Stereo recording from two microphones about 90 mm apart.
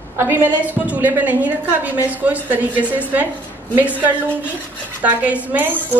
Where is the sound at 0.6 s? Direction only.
20° right (ahead or behind).